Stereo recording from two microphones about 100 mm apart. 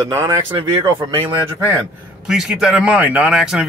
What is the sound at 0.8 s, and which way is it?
Speech, 30° right (ahead or behind).